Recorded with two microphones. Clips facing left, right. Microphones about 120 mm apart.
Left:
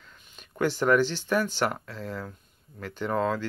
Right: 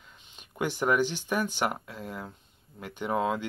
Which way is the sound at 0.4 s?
15° right (ahead or behind).